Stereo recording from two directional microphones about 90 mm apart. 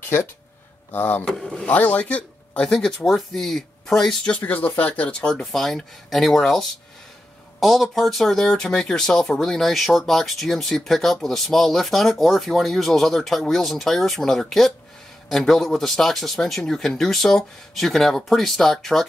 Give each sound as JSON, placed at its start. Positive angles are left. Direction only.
{"t": 0.9, "sound": "speech", "side_deg": 20}
{"t": 1.3, "sound": "speech", "side_deg": 5}
{"t": 1.7, "sound": "speech", "side_deg": 15}
{"t": 4.4, "sound": "speech", "side_deg": 20}
{"t": 7.6, "sound": "speech", "side_deg": 0}